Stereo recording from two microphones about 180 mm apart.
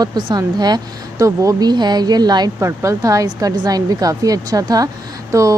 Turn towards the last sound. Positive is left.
turn(degrees=-15)  # may be behind; listen again after turning